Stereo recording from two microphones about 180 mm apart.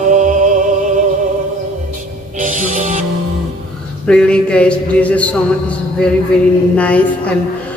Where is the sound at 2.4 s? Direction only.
45° right (ahead or behind).